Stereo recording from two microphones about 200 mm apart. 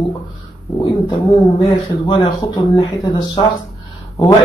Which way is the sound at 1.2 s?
25° left (ahead or behind).